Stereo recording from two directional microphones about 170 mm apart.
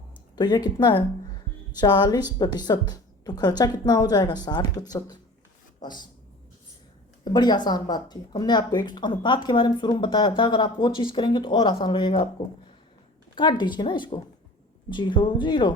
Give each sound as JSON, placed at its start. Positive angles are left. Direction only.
{"t": 0.3, "sound": "speech", "side_deg": 25}
{"t": 7.3, "sound": "speech", "side_deg": 25}
{"t": 13.3, "sound": "speech", "side_deg": 25}